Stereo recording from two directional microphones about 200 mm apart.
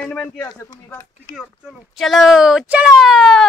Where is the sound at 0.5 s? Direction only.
15° left (ahead or behind).